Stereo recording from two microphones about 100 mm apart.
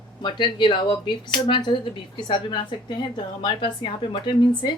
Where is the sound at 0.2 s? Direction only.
50° left (ahead or behind).